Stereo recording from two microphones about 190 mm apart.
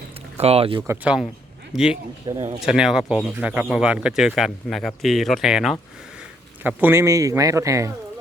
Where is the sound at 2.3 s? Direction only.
25° right (ahead or behind).